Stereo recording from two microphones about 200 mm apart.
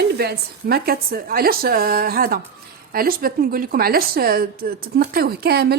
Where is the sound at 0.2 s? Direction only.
50° right (ahead or behind).